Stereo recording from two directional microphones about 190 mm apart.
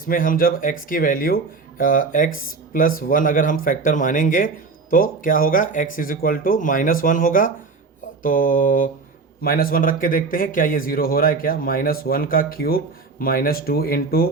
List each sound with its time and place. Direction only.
0.0 s speech: 45° left (ahead or behind)